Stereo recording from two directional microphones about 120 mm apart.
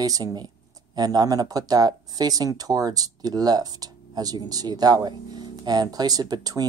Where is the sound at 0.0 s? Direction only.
35° right (ahead or behind).